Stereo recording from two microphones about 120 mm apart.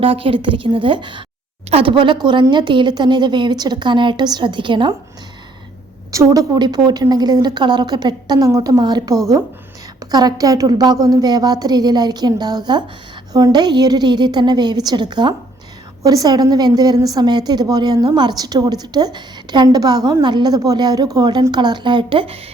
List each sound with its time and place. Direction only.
0.0 s a woman's voice: 50° right (ahead or behind)
6.1 s a woman's voice: 30° right (ahead or behind); by 22.4 s 45° right (ahead or behind)